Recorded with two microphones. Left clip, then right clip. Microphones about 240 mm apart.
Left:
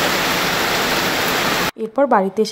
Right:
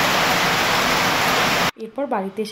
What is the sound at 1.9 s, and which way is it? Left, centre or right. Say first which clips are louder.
Speech: left 9 dB; left.